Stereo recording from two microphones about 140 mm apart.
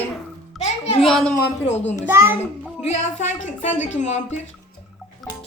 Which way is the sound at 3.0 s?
60° left (ahead or behind).